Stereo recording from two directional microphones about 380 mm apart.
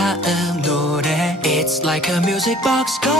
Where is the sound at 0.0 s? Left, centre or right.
Centre.